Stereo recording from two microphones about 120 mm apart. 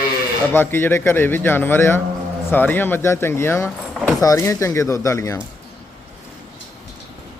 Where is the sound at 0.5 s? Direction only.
20° left (ahead or behind).